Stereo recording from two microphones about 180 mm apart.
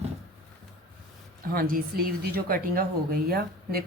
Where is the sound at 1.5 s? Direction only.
55° right (ahead or behind).